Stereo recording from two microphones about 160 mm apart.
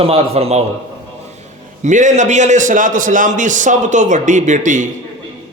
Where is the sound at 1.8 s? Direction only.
50° right (ahead or behind).